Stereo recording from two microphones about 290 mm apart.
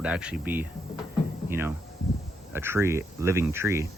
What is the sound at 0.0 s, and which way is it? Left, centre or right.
Speech, centre.